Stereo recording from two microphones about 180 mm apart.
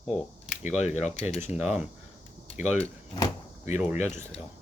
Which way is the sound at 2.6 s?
40° left (ahead or behind).